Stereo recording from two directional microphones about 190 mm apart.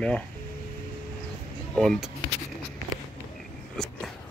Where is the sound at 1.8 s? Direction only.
Centre (ahead or behind).